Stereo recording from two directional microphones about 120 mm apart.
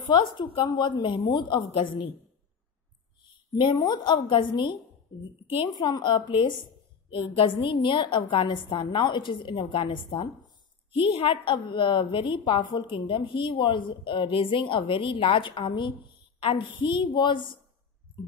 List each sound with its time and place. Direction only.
0.0 s a woman's voice: 40° left (ahead or behind)
1.7 s a woman's voice: 60° left (ahead or behind)
3.5 s a woman's voice: 40° left (ahead or behind)